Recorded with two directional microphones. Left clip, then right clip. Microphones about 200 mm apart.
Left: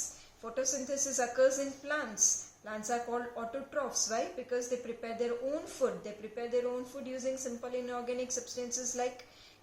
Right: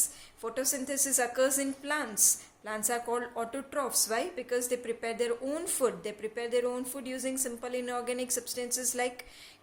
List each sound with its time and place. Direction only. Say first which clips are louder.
0.5 s a woman's voice: even; 45° right (ahead or behind)